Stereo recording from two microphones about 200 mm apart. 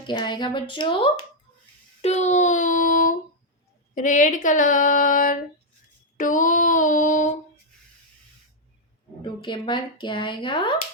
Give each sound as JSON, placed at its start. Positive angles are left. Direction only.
{"t": 0.1, "sound": "speech", "side_deg": 20}
{"t": 2.0, "sound": "child singing", "side_deg": 35}
{"t": 3.9, "sound": "speech", "side_deg": 40}
{"t": 9.2, "sound": "speech", "side_deg": 25}